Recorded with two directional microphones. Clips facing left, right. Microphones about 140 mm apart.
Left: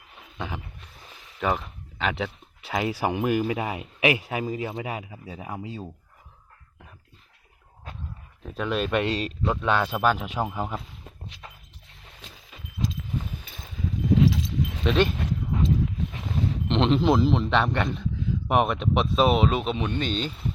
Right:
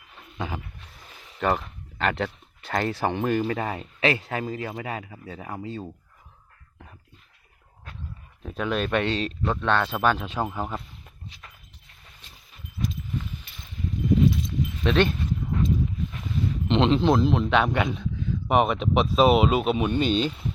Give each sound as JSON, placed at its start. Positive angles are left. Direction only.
{"t": 0.3, "sound": "a sound", "side_deg": 0}
{"t": 1.4, "sound": "speech", "side_deg": 0}
{"t": 8.4, "sound": "speech", "side_deg": 0}
{"t": 12.2, "sound": "horse", "side_deg": 90}
{"t": 14.1, "sound": "a sound", "side_deg": 90}
{"t": 14.8, "sound": "speech", "side_deg": 5}
{"t": 16.6, "sound": "speech", "side_deg": 0}